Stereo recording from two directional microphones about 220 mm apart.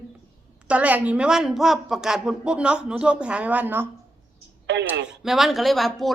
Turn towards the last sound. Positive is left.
turn(degrees=0)  # may be behind; listen again after turning